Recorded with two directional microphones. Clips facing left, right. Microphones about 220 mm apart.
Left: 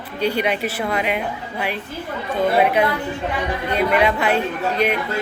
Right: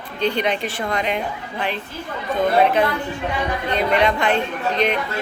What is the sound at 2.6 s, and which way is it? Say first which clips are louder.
Speech: even; 10° left (ahead or behind).